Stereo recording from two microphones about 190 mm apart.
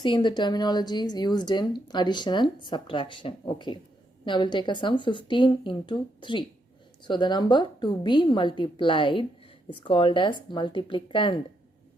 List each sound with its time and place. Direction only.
0.0 s a woman's voice: 25° left (ahead or behind)